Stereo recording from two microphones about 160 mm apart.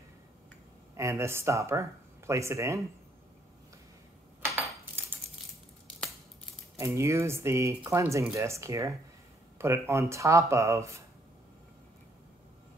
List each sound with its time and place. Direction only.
0.9 s speech: 15° right (ahead or behind)
4.6 s a sound: 15° right (ahead or behind)
6.8 s speech: 15° right (ahead or behind)